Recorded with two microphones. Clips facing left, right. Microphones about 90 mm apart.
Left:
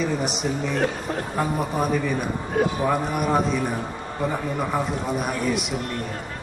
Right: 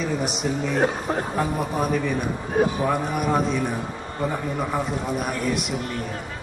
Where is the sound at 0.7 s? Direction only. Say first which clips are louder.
Right 2 dB; 30° right (ahead or behind).